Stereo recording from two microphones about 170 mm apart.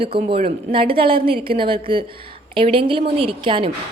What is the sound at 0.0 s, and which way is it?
A woman's voice, 35° right (ahead or behind).